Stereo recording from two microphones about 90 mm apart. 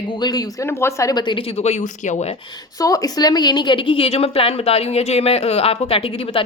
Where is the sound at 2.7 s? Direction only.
40° left (ahead or behind); by 6.4 s 90° left.